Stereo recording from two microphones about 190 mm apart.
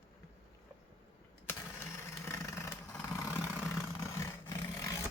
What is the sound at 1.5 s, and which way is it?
Vehicle, 15° left (ahead or behind).